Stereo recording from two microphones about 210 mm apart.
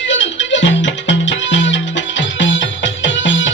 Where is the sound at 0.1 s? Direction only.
60° left (ahead or behind).